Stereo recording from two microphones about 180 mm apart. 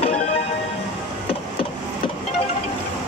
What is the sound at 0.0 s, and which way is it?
Music, 40° left (ahead or behind).